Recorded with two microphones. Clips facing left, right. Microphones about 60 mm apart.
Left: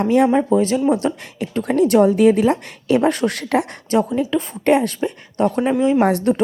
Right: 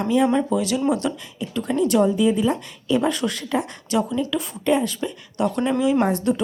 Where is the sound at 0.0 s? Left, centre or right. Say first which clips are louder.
Left 4 dB; left.